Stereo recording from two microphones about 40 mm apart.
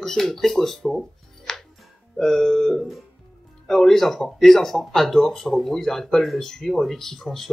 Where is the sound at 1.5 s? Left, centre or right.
Centre.